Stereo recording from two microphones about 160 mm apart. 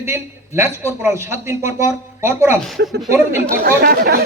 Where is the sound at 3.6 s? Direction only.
70° right (ahead or behind).